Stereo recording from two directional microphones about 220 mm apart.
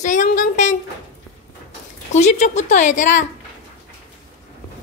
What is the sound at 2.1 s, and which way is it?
Speech, 30° left (ahead or behind).